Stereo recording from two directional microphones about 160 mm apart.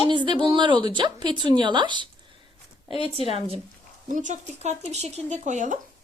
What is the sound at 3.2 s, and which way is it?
Speech, 35° right (ahead or behind).